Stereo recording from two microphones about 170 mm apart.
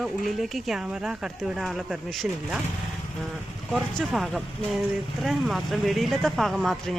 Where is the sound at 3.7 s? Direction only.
Centre (ahead or behind).